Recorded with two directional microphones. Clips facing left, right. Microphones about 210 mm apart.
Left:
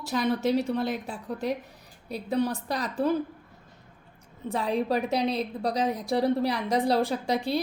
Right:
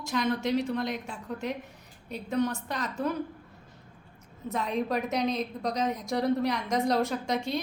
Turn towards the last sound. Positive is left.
turn(degrees=35)  # may be behind; listen again after turning